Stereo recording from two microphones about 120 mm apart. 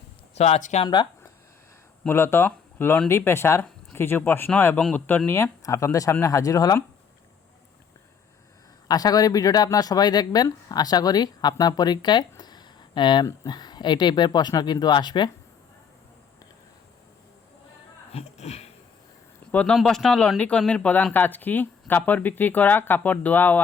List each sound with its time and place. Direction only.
0.3 s speech: 65° left (ahead or behind)
2.0 s speech: 20° left (ahead or behind)
8.9 s speech: 30° left (ahead or behind)
12.4 s a sound: 35° left (ahead or behind)
13.2 s speech: 30° left (ahead or behind)
18.1 s a sound: 60° left (ahead or behind)
19.5 s speech: 10° left (ahead or behind)
19.7 s speech: centre (ahead or behind)